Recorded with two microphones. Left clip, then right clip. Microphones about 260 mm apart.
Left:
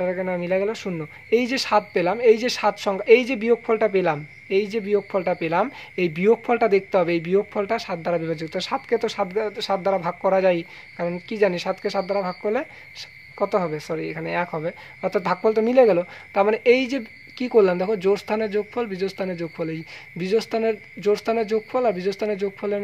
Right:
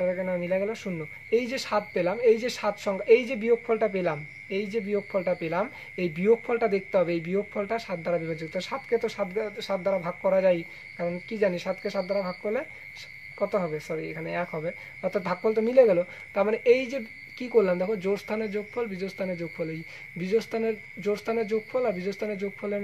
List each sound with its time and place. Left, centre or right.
0.0 s speech: left